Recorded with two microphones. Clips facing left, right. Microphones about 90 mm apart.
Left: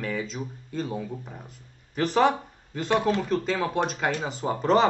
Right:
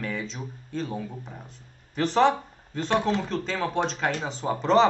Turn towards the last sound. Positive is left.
turn(degrees=5)  # may be behind; listen again after turning